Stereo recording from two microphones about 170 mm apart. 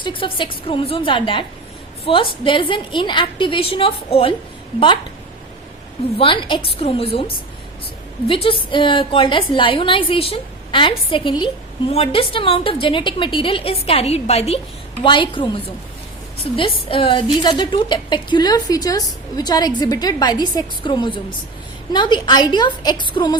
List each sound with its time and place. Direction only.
0.0 s a woman's voice: 30° left (ahead or behind)
6.1 s a woman's voice: 30° left (ahead or behind)
8.3 s a woman's voice: 30° left (ahead or behind)